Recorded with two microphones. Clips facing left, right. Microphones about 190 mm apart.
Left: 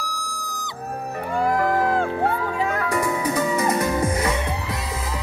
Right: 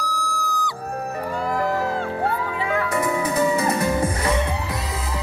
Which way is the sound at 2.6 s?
40° left (ahead or behind).